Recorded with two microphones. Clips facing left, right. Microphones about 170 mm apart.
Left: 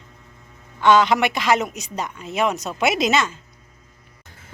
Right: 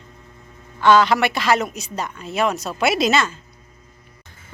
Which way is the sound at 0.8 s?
20° left (ahead or behind).